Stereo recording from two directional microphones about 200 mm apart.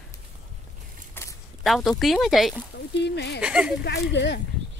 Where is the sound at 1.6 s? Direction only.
Centre (ahead or behind).